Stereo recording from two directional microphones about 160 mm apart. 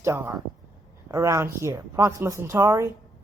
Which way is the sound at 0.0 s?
15° right (ahead or behind).